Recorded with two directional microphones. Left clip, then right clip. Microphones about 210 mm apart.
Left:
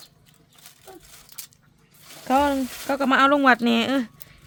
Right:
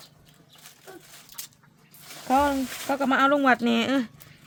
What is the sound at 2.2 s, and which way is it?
Speech, 30° left (ahead or behind).